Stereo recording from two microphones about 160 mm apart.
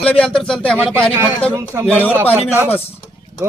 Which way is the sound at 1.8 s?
10° left (ahead or behind).